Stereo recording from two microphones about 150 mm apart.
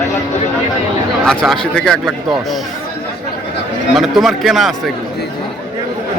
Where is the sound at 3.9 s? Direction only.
Centre (ahead or behind).